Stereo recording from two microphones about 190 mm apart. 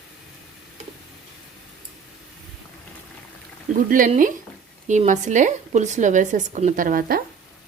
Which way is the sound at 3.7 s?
45° right (ahead or behind).